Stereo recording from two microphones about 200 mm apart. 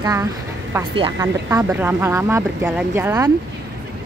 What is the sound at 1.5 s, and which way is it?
Speech, 15° right (ahead or behind).